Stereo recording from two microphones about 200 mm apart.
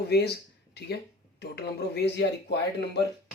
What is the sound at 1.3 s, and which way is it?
Speech, 55° left (ahead or behind).